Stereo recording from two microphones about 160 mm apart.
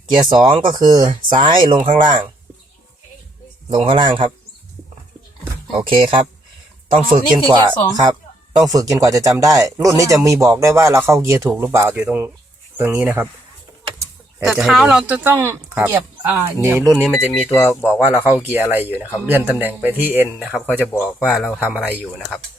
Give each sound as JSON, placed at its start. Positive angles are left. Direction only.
{"t": 0.1, "sound": "speech", "side_deg": -30}
{"t": 3.8, "sound": "speech", "side_deg": -30}
{"t": 5.7, "sound": "speech", "side_deg": -35}
{"t": 14.3, "sound": "speech", "side_deg": -5}
{"t": 17.0, "sound": "speech", "side_deg": 5}
{"t": 17.5, "sound": "speech", "side_deg": 15}
{"t": 18.5, "sound": "speech", "side_deg": -10}
{"t": 20.9, "sound": "speech", "side_deg": 10}